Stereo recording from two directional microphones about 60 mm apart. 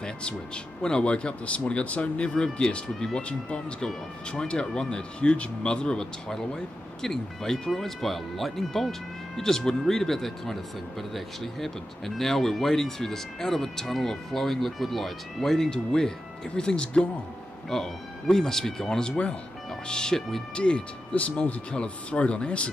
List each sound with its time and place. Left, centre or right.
0.0 s a sound: centre
0.8 s speech: centre
20.5 s speech: centre